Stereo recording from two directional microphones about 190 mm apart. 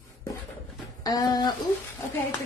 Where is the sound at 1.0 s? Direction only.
20° left (ahead or behind).